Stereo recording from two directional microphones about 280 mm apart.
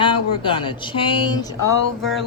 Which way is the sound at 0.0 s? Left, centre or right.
Centre.